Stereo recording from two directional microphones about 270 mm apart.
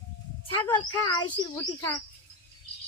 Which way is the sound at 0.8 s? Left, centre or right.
Centre.